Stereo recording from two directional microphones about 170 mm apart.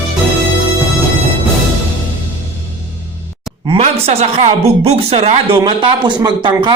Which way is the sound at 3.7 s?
35° right (ahead or behind).